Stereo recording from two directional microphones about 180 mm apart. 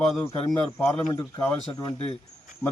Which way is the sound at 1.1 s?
15° left (ahead or behind).